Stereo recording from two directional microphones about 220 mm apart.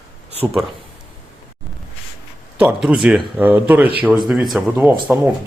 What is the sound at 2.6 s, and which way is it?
Speech, 5° right (ahead or behind).